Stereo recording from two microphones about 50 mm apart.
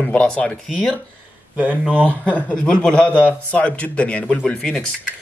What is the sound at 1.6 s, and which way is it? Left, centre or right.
Speech, right.